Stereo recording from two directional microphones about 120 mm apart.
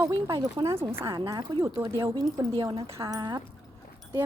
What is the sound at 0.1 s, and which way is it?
Speech, 40° right (ahead or behind).